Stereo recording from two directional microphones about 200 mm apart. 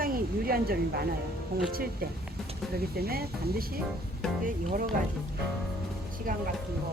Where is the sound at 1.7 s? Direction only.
50° right (ahead or behind).